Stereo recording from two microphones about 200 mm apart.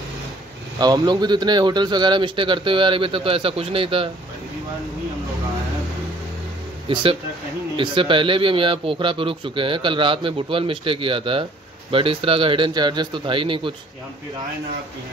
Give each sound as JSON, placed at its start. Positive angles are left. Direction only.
{"t": 0.7, "sound": "a man's voice", "side_deg": -20}
{"t": 6.9, "sound": "a man's voice", "side_deg": -25}